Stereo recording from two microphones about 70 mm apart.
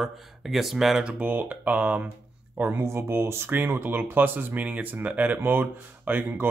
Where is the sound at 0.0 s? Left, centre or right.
Centre.